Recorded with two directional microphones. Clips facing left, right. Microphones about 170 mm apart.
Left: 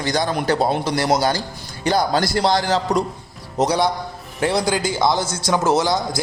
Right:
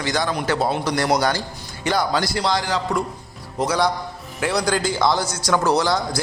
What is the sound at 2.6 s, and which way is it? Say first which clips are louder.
Speech: left 4 dB; 35° left (ahead or behind).